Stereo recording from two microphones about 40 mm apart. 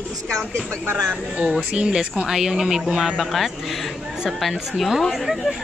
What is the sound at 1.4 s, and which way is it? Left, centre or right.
Speech, right.